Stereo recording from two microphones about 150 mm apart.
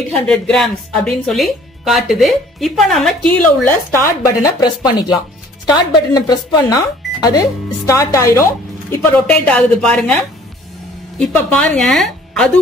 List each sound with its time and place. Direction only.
0.1 s speech: 5° left (ahead or behind); by 8.5 s 20° left (ahead or behind)
9.1 s speech: 10° left (ahead or behind)